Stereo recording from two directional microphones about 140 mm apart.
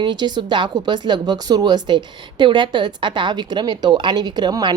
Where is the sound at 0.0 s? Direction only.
30° right (ahead or behind).